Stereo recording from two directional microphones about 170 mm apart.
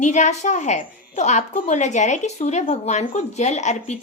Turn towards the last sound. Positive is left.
turn(degrees=45)  # may be behind; listen again after turning